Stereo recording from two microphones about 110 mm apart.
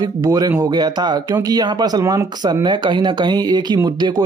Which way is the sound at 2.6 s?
45° right (ahead or behind).